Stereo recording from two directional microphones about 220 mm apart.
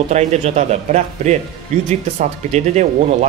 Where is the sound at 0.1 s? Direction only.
30° right (ahead or behind).